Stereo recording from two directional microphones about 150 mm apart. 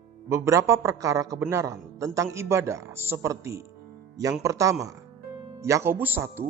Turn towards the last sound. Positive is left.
turn(degrees=-15)  # may be behind; listen again after turning